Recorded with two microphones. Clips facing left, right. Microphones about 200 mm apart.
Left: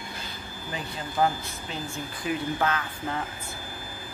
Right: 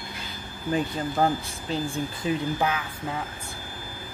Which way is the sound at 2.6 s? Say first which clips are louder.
Right 1 dB; 10° right (ahead or behind).